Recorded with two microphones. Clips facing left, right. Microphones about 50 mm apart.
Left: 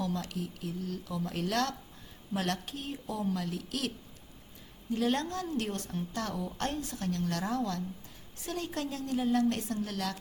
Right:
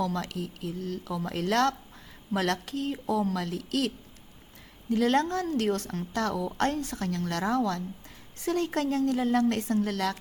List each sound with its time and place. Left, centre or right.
0.3 s a woman's voice: right